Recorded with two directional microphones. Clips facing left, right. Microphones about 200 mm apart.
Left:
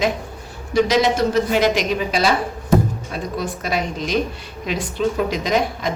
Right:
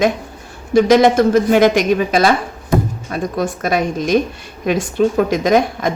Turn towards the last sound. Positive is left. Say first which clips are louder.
# right 6 dB
turn(degrees=-50)  # may be behind; listen again after turning